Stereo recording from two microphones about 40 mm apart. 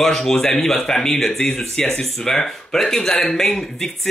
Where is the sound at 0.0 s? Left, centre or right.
Centre.